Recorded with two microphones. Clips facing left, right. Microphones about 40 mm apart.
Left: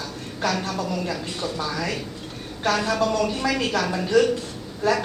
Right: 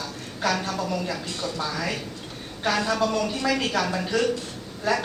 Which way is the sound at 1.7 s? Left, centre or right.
Centre.